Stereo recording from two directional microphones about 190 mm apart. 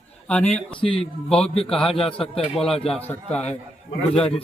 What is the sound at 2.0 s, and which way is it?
Speech, 30° left (ahead or behind).